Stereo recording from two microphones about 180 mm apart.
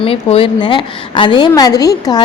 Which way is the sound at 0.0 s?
30° left (ahead or behind).